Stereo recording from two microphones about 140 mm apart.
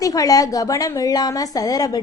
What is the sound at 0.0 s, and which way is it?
A woman's voice, 25° left (ahead or behind).